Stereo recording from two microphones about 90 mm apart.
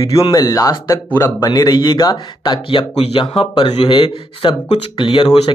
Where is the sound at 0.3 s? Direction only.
45° left (ahead or behind).